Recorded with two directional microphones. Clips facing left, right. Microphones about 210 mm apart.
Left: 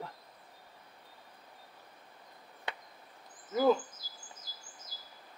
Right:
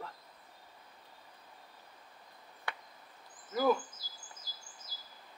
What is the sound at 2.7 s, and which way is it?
Chop, 20° left (ahead or behind).